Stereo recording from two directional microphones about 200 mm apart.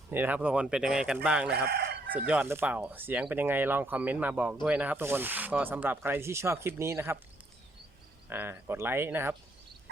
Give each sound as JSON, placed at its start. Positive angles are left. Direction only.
{"t": 0.1, "sound": "speech", "side_deg": -10}
{"t": 1.7, "sound": "crowing", "side_deg": -55}
{"t": 2.2, "sound": "speech", "side_deg": -10}
{"t": 8.3, "sound": "speech", "side_deg": -10}